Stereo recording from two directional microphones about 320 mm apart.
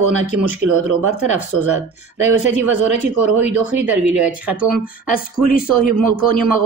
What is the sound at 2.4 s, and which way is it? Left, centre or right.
Speech, left.